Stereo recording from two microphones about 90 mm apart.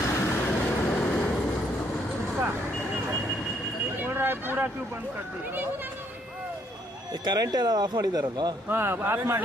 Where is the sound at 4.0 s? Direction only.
25° right (ahead or behind).